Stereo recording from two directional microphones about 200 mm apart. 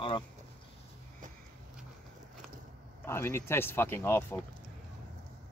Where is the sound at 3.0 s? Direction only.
10° left (ahead or behind).